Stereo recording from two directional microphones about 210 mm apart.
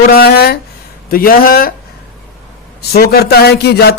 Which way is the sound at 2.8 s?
50° left (ahead or behind).